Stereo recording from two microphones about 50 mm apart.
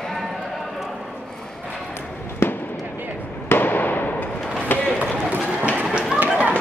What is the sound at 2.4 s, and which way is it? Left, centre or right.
Fireworks, left.